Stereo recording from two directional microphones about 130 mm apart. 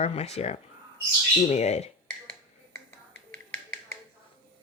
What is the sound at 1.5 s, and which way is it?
Speech, 65° left (ahead or behind).